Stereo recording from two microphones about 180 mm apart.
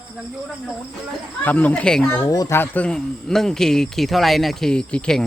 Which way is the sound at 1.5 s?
10° left (ahead or behind).